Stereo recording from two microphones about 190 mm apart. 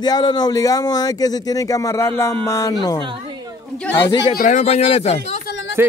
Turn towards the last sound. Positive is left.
turn(degrees=-10)  # may be behind; listen again after turning